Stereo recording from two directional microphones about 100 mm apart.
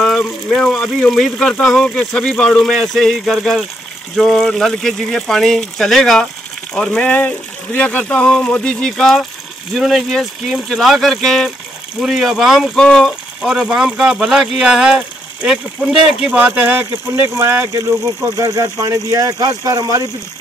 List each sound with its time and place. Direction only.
0.5 s speech: 5° left (ahead or behind); by 20.1 s 40° right (ahead or behind)